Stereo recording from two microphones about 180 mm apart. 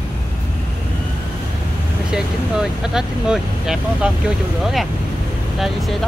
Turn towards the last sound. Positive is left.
turn(degrees=0)  # may be behind; listen again after turning